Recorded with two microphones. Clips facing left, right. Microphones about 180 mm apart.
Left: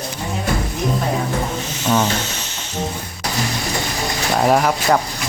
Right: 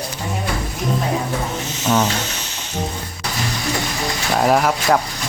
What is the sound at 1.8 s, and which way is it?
Speech, centre (ahead or behind).